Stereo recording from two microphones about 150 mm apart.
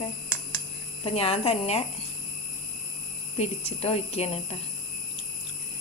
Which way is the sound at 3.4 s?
45° left (ahead or behind).